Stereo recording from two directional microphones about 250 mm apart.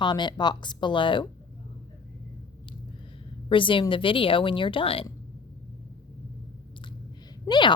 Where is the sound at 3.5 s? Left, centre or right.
Centre.